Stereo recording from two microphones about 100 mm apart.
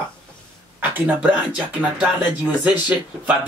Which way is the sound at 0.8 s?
15° right (ahead or behind).